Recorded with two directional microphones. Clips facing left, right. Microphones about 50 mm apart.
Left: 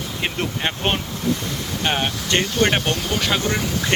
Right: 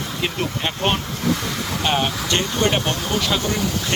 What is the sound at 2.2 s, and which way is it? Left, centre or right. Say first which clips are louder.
Speech: left 1 dB; left.